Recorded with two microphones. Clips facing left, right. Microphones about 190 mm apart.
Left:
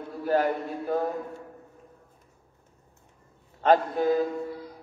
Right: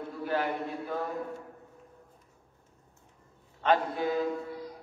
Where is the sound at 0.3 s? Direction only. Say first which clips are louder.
Left 6 dB; 45° left (ahead or behind).